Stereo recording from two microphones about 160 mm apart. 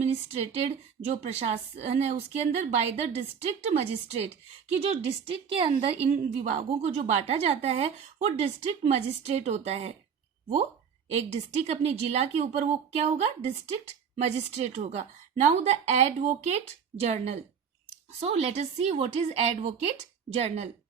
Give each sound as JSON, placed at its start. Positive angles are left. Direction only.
{"t": 0.0, "sound": "a woman's voice", "side_deg": -40}
{"t": 11.1, "sound": "a woman's voice", "side_deg": -45}